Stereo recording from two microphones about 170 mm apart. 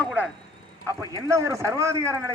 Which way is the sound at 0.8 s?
20° right (ahead or behind).